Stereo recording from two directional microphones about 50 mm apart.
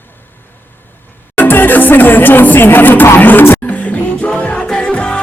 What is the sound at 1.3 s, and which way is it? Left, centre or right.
Music, left.